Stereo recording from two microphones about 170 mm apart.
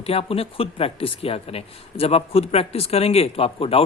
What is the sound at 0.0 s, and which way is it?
Speech, 35° left (ahead or behind).